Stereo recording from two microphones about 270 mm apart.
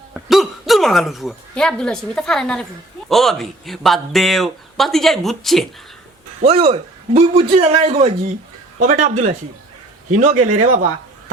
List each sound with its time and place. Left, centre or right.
0.1 s speech: centre
6.4 s a man's voice: right